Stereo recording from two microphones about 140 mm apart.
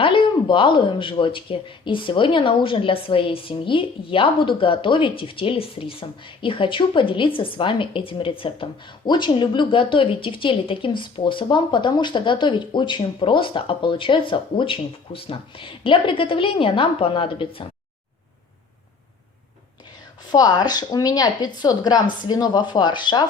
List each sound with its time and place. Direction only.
0.0 s speech: 35° left (ahead or behind)
20.2 s a woman's voice: 30° left (ahead or behind)